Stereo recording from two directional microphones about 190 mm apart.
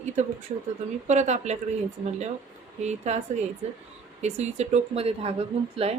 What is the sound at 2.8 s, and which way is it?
A woman's voice, 35° right (ahead or behind).